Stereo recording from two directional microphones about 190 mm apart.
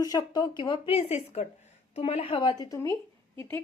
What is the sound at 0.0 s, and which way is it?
A woman's voice, 20° left (ahead or behind).